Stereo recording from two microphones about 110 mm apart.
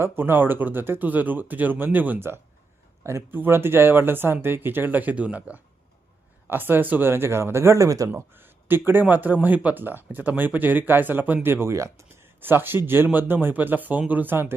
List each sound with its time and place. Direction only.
0.0 s speech: 20° right (ahead or behind)
8.1 s speech: 20° right (ahead or behind)